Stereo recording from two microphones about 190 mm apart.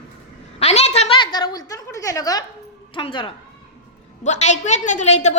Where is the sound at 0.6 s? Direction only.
35° left (ahead or behind).